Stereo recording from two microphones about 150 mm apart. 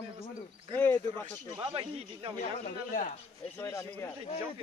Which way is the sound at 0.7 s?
15° left (ahead or behind).